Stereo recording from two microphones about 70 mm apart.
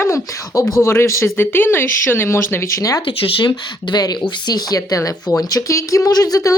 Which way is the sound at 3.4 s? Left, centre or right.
Left.